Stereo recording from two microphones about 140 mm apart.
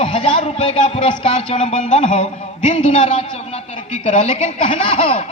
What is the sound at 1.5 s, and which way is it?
Speech, 55° left (ahead or behind).